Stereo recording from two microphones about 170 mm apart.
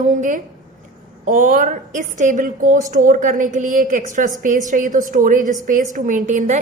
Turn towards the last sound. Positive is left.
turn(degrees=-45)  # may be behind; listen again after turning